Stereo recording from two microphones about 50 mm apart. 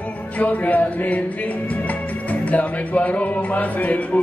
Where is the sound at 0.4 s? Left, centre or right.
Left.